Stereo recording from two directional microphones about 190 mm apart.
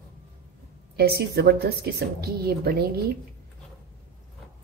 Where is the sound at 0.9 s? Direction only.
55° right (ahead or behind).